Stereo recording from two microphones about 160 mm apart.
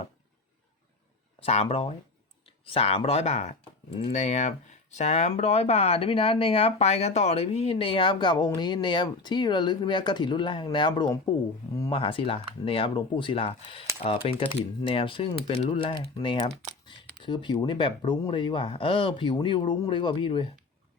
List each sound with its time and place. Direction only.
1.5 s speech: 35° left (ahead or behind)